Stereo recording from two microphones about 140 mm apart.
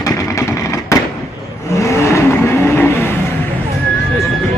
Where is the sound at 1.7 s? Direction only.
20° left (ahead or behind).